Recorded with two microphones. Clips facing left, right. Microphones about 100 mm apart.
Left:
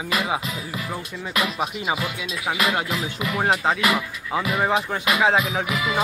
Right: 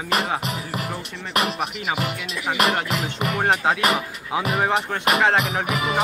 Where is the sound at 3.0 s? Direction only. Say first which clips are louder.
Right 2 dB; 60° right (ahead or behind).